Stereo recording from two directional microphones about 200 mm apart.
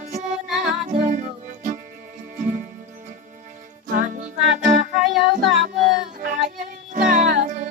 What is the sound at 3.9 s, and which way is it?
Music, 40° right (ahead or behind).